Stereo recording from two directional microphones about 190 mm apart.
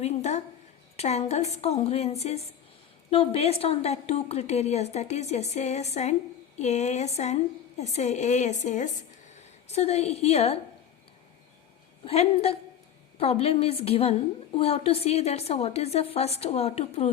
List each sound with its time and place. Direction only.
0.0 s a woman's voice: 35° left (ahead or behind)
12.0 s a woman's voice: 35° left (ahead or behind)